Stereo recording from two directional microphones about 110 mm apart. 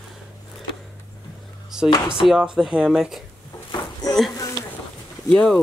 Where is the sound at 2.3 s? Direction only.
5° right (ahead or behind).